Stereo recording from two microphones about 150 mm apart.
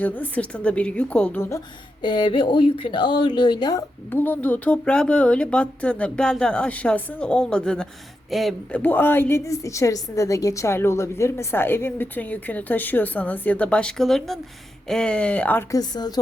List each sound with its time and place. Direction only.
0.0 s a woman's voice: 10° left (ahead or behind)
2.0 s speech: 30° left (ahead or behind)
4.1 s a woman's voice: 10° left (ahead or behind)
8.8 s a woman's voice: 10° left (ahead or behind)
15.7 s a woman's voice: 25° left (ahead or behind)